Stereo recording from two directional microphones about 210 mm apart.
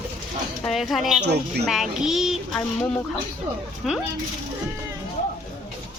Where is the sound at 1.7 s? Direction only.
Centre (ahead or behind).